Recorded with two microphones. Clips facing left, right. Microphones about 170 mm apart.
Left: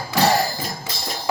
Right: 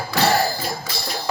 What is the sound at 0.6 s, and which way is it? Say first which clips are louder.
Music: right 2 dB; 45° left (ahead or behind).